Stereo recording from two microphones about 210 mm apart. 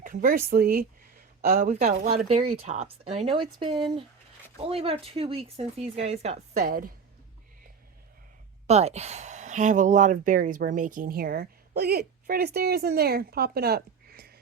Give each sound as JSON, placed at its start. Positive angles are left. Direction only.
{"t": 0.0, "sound": "speech", "side_deg": -40}
{"t": 1.7, "sound": "speech", "side_deg": -30}
{"t": 8.6, "sound": "speech", "side_deg": -30}